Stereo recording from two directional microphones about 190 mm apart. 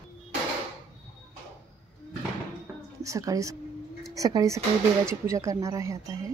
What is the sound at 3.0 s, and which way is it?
Speech, 15° right (ahead or behind).